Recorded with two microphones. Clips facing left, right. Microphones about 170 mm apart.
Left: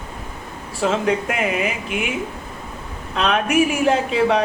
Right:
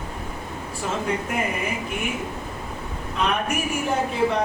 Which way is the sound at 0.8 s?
90° left.